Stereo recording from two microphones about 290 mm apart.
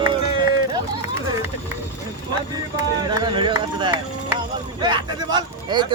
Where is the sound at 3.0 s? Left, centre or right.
Centre.